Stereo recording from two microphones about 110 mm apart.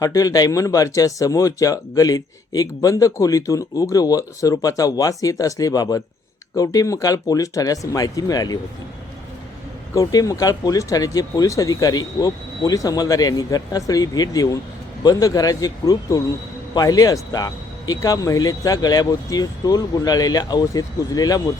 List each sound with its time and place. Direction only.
0.0 s speech: 30° left (ahead or behind)
9.9 s speech: 35° left (ahead or behind)